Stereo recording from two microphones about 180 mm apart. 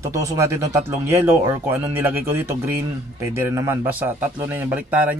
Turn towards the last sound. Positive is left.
turn(degrees=-10)  # may be behind; listen again after turning